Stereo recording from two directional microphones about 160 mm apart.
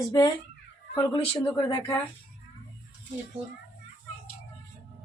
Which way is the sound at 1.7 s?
20° left (ahead or behind).